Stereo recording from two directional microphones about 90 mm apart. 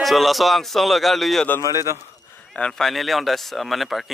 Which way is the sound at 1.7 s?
40° right (ahead or behind).